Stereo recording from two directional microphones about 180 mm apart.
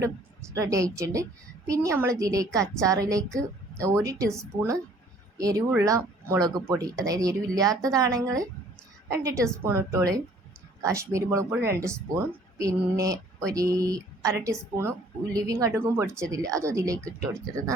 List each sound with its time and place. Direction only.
0.5 s speech: 20° right (ahead or behind)